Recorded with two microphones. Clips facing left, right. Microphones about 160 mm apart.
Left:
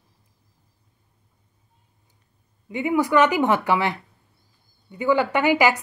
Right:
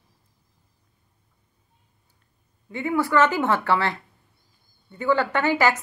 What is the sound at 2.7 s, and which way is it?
Speech, 15° left (ahead or behind).